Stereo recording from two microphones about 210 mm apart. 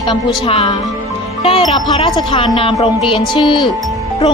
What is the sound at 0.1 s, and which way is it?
Speech, 25° left (ahead or behind).